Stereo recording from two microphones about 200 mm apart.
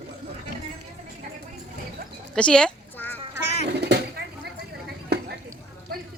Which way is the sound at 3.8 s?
55° right (ahead or behind).